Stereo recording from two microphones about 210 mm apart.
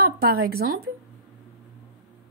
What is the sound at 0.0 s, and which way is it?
Speech, 45° right (ahead or behind).